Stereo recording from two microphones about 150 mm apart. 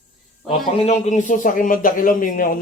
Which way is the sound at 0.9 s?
55° left (ahead or behind).